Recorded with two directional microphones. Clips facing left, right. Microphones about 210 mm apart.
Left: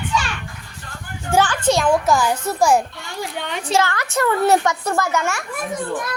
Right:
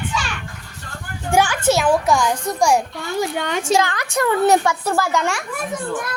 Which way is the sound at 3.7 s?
15° right (ahead or behind).